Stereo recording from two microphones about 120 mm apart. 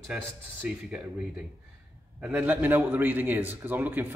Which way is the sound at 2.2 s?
10° right (ahead or behind).